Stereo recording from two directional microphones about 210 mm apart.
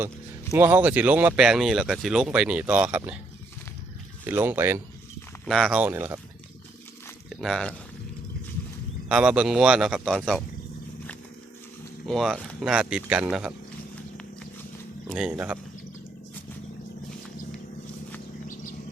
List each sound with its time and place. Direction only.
0.5 s speech: 10° right (ahead or behind)
4.2 s speech: 10° right (ahead or behind)
7.3 s speech: centre (ahead or behind)
9.0 s speech: 5° right (ahead or behind)
12.0 s speech: centre (ahead or behind)
15.0 s speech: 5° right (ahead or behind)
18.4 s a sound: 40° left (ahead or behind)